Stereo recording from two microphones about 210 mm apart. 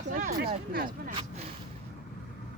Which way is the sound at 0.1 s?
40° right (ahead or behind).